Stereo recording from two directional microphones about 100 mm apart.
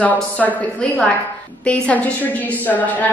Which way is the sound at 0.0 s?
15° left (ahead or behind).